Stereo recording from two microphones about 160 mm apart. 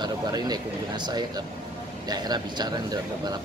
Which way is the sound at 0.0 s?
25° right (ahead or behind).